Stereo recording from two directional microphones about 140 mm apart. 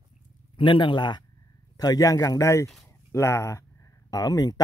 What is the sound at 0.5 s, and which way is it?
Speech, 35° left (ahead or behind).